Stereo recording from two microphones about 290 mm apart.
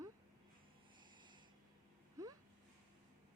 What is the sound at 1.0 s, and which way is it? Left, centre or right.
Snort, centre.